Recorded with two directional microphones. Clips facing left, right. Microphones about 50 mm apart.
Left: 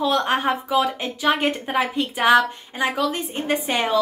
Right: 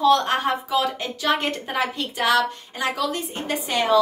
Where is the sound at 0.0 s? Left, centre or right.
Centre.